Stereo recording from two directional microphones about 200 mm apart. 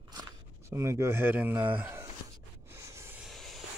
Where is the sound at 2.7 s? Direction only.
15° right (ahead or behind).